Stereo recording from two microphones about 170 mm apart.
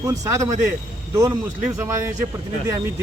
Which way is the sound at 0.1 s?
20° right (ahead or behind).